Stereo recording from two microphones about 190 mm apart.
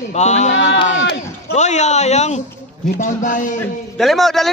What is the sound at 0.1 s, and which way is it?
Speech, 35° left (ahead or behind).